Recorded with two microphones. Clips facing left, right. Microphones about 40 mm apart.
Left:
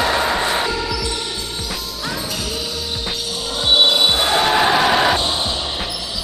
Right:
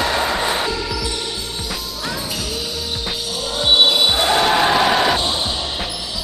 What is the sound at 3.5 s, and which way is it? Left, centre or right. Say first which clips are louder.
Basketball bounce: even; centre.